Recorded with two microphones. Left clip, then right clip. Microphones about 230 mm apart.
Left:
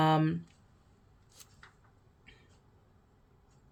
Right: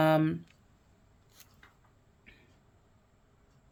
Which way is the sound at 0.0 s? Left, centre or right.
Right.